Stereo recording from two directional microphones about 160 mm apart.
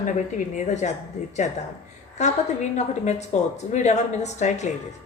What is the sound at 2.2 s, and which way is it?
A woman's voice, 45° left (ahead or behind).